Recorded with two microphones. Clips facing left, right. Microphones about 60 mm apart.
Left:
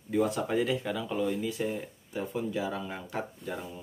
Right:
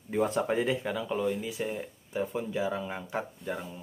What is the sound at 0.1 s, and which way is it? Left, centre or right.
Speech, right.